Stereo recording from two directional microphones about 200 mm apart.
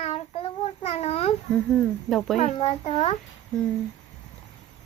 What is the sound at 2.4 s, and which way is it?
Speech, 35° left (ahead or behind).